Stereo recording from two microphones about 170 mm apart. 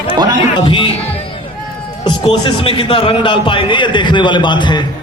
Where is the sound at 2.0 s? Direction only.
30° left (ahead or behind).